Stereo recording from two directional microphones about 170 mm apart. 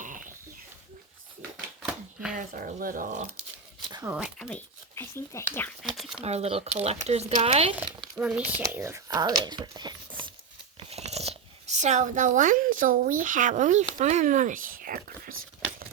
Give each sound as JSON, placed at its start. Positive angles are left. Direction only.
{"t": 0.0, "sound": "oink", "side_deg": -50}
{"t": 1.8, "sound": "typewriter", "side_deg": 0}
{"t": 2.3, "sound": "speech", "side_deg": -50}
{"t": 4.0, "sound": "speech", "side_deg": -5}
{"t": 4.4, "sound": "speech", "side_deg": 15}
{"t": 5.8, "sound": "speech", "side_deg": -5}
{"t": 6.1, "sound": "speech", "side_deg": -40}
{"t": 8.1, "sound": "speech", "side_deg": -5}